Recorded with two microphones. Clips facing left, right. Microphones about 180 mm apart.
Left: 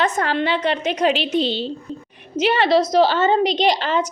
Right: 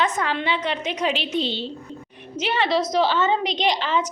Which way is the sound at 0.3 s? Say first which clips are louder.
Left 4 dB; 35° left (ahead or behind).